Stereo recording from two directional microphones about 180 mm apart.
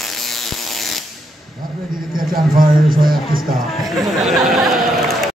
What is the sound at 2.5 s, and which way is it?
Speech, 50° right (ahead or behind).